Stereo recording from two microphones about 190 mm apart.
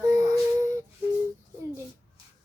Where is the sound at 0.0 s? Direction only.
20° right (ahead or behind).